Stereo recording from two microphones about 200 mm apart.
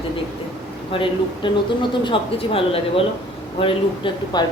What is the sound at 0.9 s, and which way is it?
Speech, 25° left (ahead or behind).